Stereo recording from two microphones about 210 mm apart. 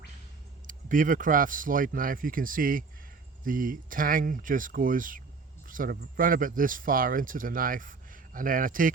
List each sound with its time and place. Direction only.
0.7 s speech: 40° right (ahead or behind)